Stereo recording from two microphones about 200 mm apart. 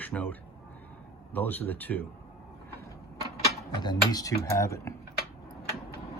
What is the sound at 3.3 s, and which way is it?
Mechanisms, 20° left (ahead or behind).